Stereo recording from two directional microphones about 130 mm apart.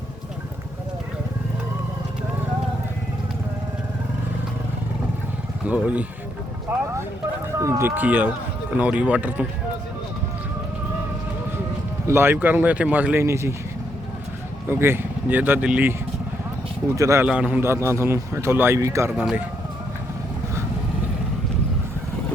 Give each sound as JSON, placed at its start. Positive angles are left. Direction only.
{"t": 5.6, "sound": "speech", "side_deg": -10}
{"t": 7.6, "sound": "speech", "side_deg": -20}
{"t": 12.0, "sound": "speech", "side_deg": -20}
{"t": 14.7, "sound": "speech", "side_deg": -20}
{"t": 16.9, "sound": "a man's voice", "side_deg": -25}
{"t": 17.2, "sound": "a man's voice", "side_deg": -10}
{"t": 19.1, "sound": "speech", "side_deg": -10}